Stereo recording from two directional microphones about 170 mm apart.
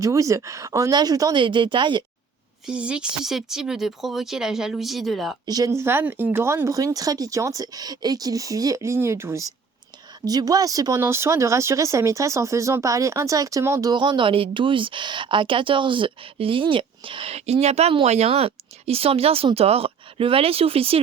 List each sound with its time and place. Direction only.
0.0 s speech: 20° right (ahead or behind)
2.6 s speech: 5° right (ahead or behind)
5.5 s speech: 20° right (ahead or behind)
13.9 s speech: 25° right (ahead or behind)